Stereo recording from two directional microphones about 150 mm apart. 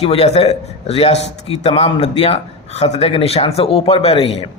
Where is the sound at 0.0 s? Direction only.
40° left (ahead or behind).